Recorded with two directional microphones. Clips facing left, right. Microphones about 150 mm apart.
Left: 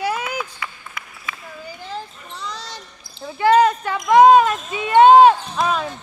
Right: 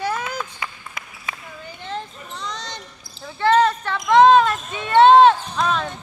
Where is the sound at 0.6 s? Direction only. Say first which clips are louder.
Even; 25° right (ahead or behind).